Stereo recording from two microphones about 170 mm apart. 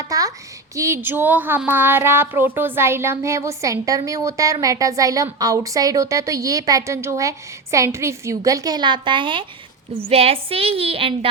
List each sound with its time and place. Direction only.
0.0 s a child's voice: 20° right (ahead or behind)